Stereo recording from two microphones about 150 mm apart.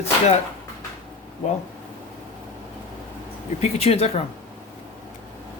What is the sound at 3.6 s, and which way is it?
Speech, 45° left (ahead or behind).